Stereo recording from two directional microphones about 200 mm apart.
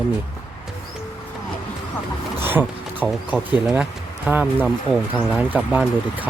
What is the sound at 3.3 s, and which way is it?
Speech, 5° right (ahead or behind).